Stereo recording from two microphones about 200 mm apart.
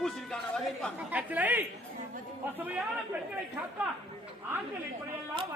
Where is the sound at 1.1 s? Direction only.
10° right (ahead or behind).